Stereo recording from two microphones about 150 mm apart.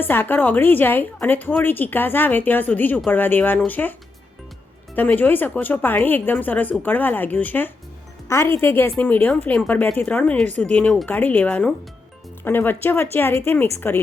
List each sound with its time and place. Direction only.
0.0 s a woman's voice: 15° left (ahead or behind)
4.9 s a woman's voice: 10° left (ahead or behind)